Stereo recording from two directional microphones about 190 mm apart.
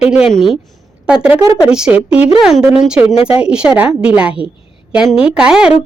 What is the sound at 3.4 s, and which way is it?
Speech, 5° right (ahead or behind).